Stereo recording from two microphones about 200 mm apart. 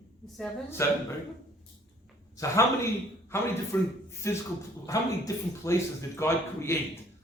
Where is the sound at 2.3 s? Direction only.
15° left (ahead or behind).